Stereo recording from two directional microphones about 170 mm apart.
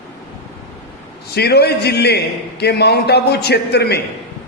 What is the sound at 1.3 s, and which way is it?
A man's voice, 70° left (ahead or behind).